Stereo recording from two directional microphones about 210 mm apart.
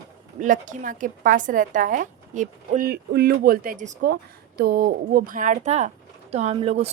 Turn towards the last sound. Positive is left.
turn(degrees=-30)  # may be behind; listen again after turning